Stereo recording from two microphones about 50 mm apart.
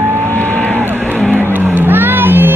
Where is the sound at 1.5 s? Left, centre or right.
Right.